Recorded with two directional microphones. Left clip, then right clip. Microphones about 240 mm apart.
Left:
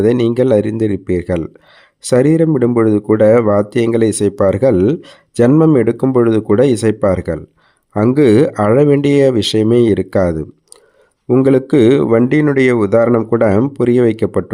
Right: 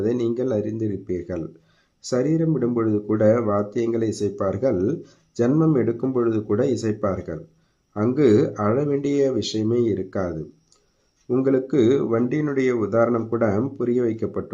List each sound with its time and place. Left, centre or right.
0.0 s speech: left